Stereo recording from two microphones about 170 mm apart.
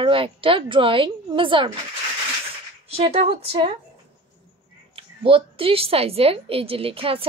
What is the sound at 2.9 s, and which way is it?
Speech, 35° right (ahead or behind).